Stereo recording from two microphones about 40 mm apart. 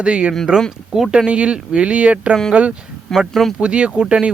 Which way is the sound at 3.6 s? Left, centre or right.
Right.